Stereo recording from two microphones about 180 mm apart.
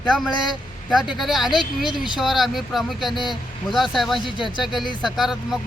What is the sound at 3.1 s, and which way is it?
Speech, 25° left (ahead or behind).